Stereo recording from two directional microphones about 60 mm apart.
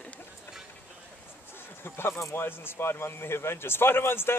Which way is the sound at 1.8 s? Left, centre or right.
Left.